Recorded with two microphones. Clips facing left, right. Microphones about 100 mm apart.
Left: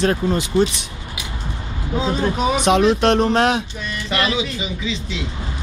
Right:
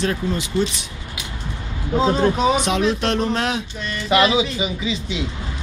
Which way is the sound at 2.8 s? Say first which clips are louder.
Left 5 dB; 55° left (ahead or behind).